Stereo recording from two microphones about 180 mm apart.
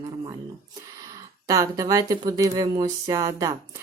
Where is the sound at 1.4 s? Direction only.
20° right (ahead or behind).